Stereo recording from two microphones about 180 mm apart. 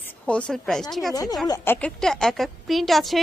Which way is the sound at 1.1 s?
20° left (ahead or behind).